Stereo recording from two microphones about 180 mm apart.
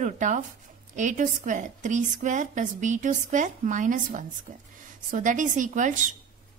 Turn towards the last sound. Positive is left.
turn(degrees=-45)  # may be behind; listen again after turning